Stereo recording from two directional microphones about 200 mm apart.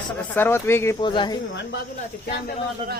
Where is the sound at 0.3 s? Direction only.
10° left (ahead or behind).